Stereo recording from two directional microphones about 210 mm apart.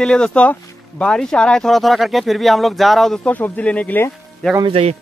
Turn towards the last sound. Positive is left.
turn(degrees=-25)  # may be behind; listen again after turning